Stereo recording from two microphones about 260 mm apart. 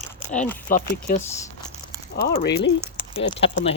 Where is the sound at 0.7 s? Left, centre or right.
Left.